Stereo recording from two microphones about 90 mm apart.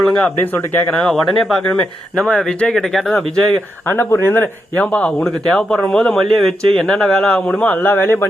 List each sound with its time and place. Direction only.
0.0 s a man's voice: 10° left (ahead or behind)
3.8 s speech: 25° left (ahead or behind)
4.8 s a man's voice: 15° left (ahead or behind)